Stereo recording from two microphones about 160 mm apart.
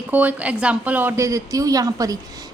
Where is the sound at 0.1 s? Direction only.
10° right (ahead or behind).